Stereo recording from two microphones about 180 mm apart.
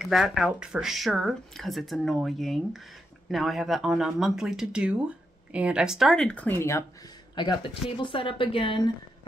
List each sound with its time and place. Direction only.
0.0 s speech: centre (ahead or behind)
7.3 s speech: 25° left (ahead or behind)